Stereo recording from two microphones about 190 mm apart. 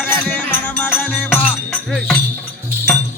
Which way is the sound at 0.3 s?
10° left (ahead or behind).